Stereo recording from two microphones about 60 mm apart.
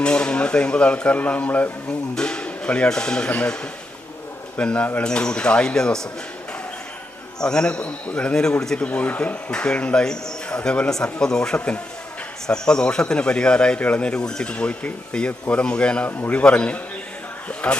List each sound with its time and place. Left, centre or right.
0.0 s speech: centre
1.9 s speech: centre
7.4 s speech: centre